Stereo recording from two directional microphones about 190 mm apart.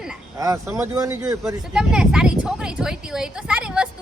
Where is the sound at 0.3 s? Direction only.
15° right (ahead or behind).